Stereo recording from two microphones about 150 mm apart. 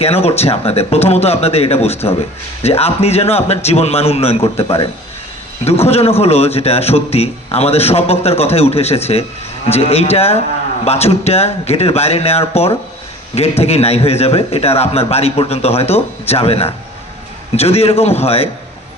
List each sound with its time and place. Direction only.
0.0 s a man's voice: 45° left (ahead or behind)